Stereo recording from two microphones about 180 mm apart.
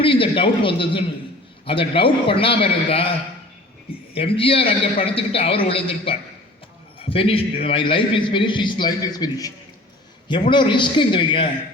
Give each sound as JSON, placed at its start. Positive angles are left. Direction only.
{"t": 0.0, "sound": "a man's voice", "side_deg": 30}
{"t": 4.1, "sound": "a man's voice", "side_deg": 30}
{"t": 10.5, "sound": "a man's voice", "side_deg": 25}